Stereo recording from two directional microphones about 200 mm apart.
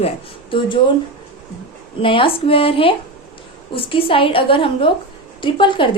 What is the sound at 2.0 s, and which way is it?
A woman's voice, 25° left (ahead or behind).